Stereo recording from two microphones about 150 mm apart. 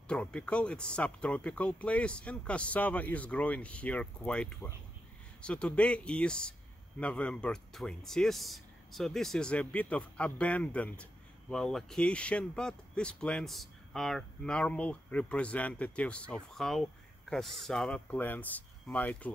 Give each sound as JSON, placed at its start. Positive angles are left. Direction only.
{"t": 0.1, "sound": "speech", "side_deg": 5}